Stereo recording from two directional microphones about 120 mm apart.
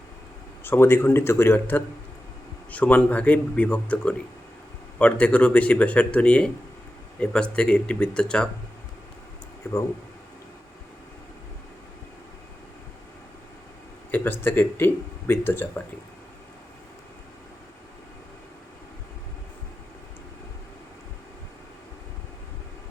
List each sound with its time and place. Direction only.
0.6 s speech: 20° left (ahead or behind)
9.6 s speech: 20° left (ahead or behind)
14.1 s speech: 20° left (ahead or behind)